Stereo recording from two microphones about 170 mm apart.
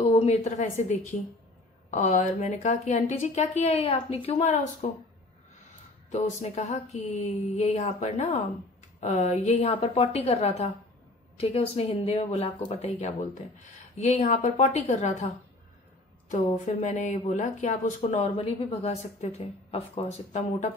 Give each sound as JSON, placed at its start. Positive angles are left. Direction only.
{"t": 0.0, "sound": "a woman's voice", "side_deg": 40}
{"t": 6.0, "sound": "speech", "side_deg": 40}
{"t": 9.7, "sound": "speech", "side_deg": 30}
{"t": 16.3, "sound": "speech", "side_deg": 45}
{"t": 18.2, "sound": "speech", "side_deg": 30}